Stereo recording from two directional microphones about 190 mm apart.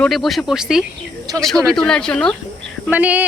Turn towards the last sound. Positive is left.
turn(degrees=-10)  # may be behind; listen again after turning